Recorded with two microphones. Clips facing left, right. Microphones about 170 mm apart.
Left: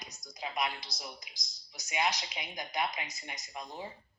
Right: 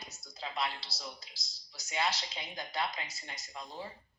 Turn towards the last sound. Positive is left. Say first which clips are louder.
# left 1 dB
turn(degrees=20)  # may be behind; listen again after turning